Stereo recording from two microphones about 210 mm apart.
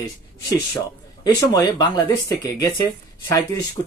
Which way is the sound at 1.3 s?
15° left (ahead or behind).